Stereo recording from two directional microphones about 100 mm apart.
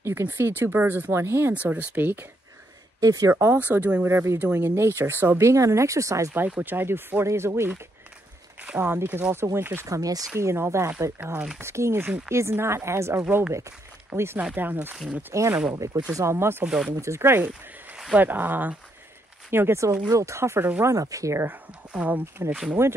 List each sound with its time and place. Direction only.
0.0 s speech: 25° right (ahead or behind)
1.5 s speech: 15° right (ahead or behind)
3.0 s speech: 35° right (ahead or behind)
3.3 s speech: 20° right (ahead or behind)
6.4 s speech: 20° right (ahead or behind)
9.8 s speech: 35° right (ahead or behind)
11.3 s speech: 5° right (ahead or behind)
11.6 s speech: 25° right (ahead or behind)
15.7 s speech: 30° right (ahead or behind)
16.6 s speech: 5° right (ahead or behind)
16.9 s speech: 30° right (ahead or behind)
17.5 s a sound: 5° right (ahead or behind)
18.2 s speech: 20° right (ahead or behind)
21.5 s speech: 15° right (ahead or behind)